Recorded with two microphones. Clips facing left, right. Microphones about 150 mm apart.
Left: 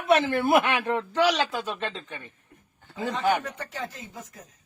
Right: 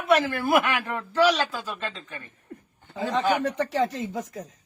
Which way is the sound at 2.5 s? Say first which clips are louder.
Right 13 dB; 75° right (ahead or behind).